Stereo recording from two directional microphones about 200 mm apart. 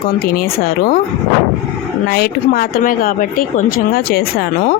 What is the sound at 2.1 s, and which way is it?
A woman's voice, 50° left (ahead or behind).